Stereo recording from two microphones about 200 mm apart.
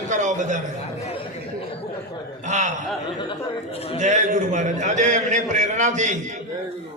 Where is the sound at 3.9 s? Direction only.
35° right (ahead or behind).